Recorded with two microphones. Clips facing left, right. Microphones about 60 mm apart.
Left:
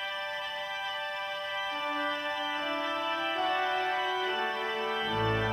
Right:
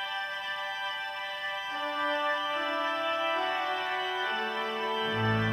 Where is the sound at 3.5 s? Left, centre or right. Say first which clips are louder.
Left 2 dB; centre.